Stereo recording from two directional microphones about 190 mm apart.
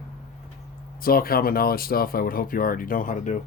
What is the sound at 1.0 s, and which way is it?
Speech, 50° left (ahead or behind).